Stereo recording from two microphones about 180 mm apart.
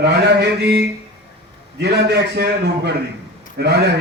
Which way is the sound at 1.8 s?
70° right (ahead or behind).